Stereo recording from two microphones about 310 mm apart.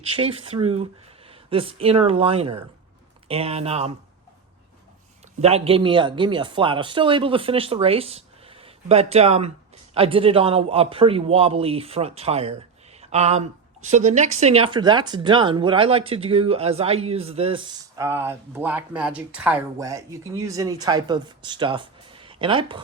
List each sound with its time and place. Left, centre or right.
0.2 s a man's voice: centre
5.4 s a man's voice: centre